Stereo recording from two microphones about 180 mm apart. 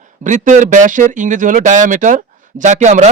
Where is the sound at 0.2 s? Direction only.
45° right (ahead or behind).